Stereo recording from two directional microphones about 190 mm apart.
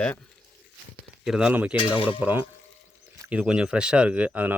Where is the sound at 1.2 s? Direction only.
5° right (ahead or behind).